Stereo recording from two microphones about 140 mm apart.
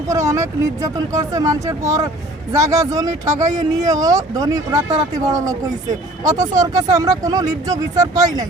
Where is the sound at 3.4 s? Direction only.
60° right (ahead or behind).